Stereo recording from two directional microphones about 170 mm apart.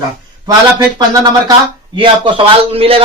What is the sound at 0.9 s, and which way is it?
Speech, 25° right (ahead or behind).